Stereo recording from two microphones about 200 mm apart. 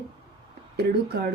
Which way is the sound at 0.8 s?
55° right (ahead or behind).